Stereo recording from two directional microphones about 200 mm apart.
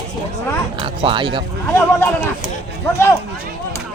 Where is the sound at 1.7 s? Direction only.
10° left (ahead or behind).